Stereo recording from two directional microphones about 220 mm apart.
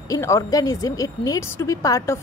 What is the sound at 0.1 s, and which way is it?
Speech, 15° left (ahead or behind).